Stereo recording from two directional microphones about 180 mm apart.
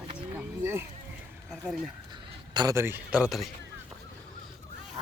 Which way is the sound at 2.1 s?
20° right (ahead or behind).